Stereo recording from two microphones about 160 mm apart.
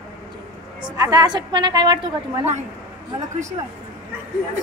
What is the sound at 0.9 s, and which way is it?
A woman's voice, 25° right (ahead or behind).